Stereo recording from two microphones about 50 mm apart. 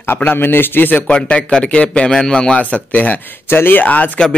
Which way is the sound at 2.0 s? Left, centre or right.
Centre.